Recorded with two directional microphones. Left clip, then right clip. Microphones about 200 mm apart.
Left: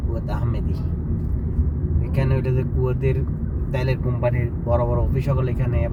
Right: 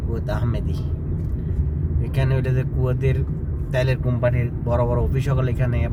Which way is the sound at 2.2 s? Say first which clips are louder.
Left 1 dB; 30° right (ahead or behind).